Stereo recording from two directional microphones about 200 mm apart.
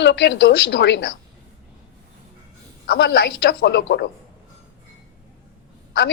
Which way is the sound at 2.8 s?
55° left (ahead or behind).